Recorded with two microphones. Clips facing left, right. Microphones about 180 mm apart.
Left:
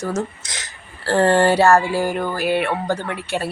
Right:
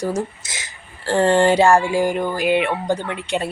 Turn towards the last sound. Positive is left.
turn(degrees=-20)  # may be behind; listen again after turning